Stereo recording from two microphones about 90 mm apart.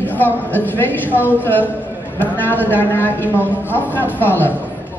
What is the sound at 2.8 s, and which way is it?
A man's voice, 25° left (ahead or behind).